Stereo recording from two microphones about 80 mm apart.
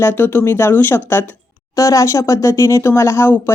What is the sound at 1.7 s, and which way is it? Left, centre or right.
Speech, left.